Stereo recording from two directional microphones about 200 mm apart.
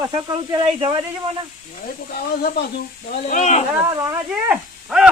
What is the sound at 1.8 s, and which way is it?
Speech, 50° left (ahead or behind).